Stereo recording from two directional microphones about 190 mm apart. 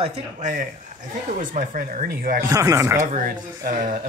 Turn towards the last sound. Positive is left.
turn(degrees=-40)  # may be behind; listen again after turning